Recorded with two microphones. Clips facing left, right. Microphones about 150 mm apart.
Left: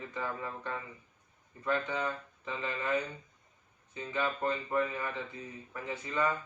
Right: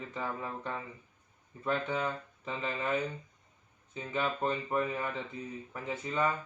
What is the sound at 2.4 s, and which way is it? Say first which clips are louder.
Speech: right 1 dB; 25° right (ahead or behind).